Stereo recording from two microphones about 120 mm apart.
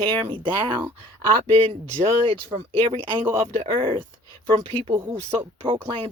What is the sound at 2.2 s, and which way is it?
Speech, 45° right (ahead or behind).